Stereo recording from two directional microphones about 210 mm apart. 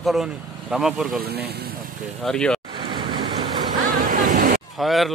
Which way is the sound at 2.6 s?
20° right (ahead or behind).